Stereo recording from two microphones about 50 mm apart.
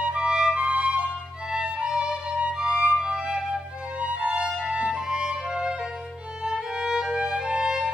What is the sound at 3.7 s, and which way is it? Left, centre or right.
Music, right.